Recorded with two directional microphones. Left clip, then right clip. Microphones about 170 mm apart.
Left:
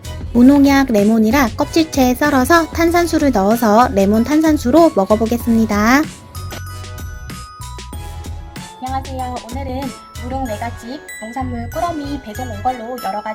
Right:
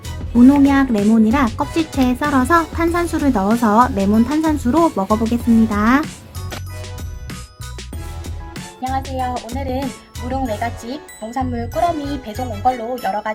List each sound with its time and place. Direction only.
0.3 s a woman's voice: 15° left (ahead or behind)
3.9 s speech: centre (ahead or behind)
5.3 s speech: 20° left (ahead or behind)
8.5 s music: centre (ahead or behind)
11.3 s speech: 10° right (ahead or behind)